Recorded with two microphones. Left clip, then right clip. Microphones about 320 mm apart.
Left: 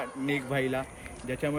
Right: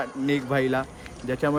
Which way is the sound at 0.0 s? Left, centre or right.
Centre.